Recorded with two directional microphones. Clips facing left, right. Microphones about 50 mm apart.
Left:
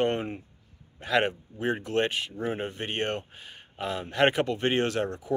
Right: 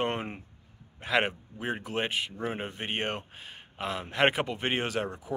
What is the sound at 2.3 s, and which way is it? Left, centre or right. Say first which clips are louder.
Speech: left 3 dB; centre.